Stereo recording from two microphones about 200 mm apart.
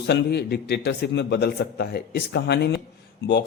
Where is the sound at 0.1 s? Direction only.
55° left (ahead or behind).